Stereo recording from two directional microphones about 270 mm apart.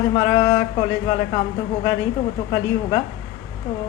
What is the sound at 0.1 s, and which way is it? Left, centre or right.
A woman's voice, centre.